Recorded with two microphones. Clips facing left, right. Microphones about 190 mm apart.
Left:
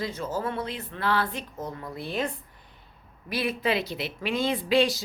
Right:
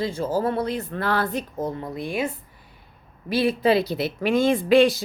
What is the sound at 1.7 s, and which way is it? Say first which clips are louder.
Speech: right 4 dB; 20° right (ahead or behind).